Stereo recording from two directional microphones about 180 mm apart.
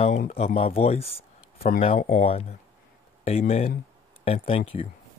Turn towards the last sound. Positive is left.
turn(degrees=35)  # may be behind; listen again after turning